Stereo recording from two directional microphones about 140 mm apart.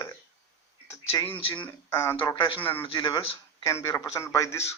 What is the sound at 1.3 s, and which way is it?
Speech, 35° left (ahead or behind).